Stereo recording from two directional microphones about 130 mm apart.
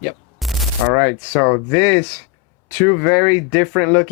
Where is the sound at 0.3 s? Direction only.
Centre (ahead or behind).